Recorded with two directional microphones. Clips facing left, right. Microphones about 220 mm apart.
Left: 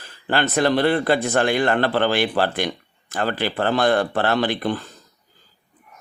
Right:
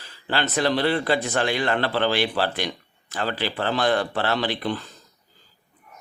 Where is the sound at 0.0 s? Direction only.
50° left (ahead or behind).